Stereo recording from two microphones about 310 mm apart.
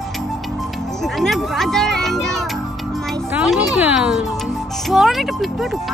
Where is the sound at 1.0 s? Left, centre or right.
Centre.